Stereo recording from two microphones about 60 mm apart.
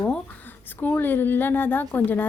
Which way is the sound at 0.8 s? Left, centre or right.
Left.